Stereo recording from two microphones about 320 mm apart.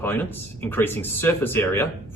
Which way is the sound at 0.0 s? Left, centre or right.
Centre.